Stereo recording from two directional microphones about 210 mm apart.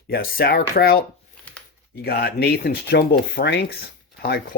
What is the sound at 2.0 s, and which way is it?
Speech, 45° left (ahead or behind).